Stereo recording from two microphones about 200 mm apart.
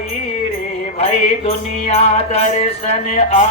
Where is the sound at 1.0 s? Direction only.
30° left (ahead or behind).